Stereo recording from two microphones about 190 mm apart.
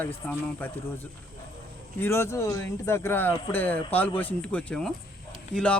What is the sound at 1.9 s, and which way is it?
Speech, 15° left (ahead or behind).